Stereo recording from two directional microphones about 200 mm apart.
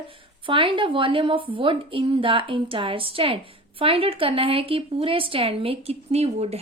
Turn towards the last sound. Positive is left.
turn(degrees=-30)  # may be behind; listen again after turning